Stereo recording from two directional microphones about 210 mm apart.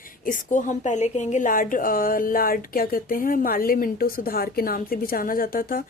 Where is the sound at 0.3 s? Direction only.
40° left (ahead or behind).